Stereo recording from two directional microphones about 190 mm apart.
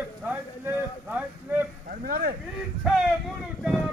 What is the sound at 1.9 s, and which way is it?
Speech, 50° right (ahead or behind).